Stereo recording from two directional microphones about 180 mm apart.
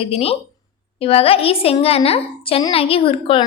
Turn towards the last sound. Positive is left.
turn(degrees=30)  # may be behind; listen again after turning